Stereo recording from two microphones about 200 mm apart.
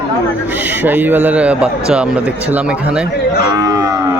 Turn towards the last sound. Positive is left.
turn(degrees=-20)  # may be behind; listen again after turning